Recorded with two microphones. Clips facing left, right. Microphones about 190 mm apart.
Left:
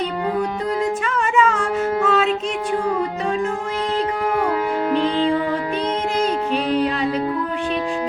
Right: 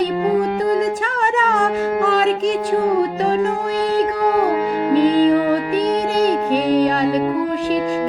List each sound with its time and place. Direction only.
1.2 s music: 35° right (ahead or behind)
4.9 s music: 40° right (ahead or behind)